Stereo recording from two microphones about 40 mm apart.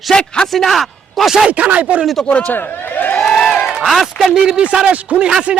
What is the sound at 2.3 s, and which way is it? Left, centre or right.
Speech, left.